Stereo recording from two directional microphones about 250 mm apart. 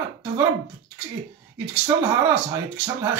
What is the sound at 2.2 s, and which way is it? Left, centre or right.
Speech, centre.